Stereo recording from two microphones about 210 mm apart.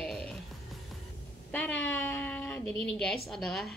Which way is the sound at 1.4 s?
5° left (ahead or behind).